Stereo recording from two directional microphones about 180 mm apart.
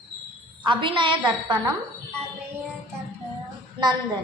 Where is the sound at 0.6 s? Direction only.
25° right (ahead or behind).